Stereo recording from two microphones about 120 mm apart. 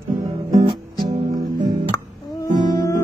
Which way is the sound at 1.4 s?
35° right (ahead or behind).